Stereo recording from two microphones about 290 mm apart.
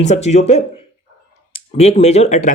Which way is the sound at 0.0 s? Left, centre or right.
Left.